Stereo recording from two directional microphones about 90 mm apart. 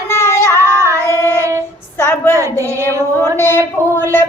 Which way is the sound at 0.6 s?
30° right (ahead or behind).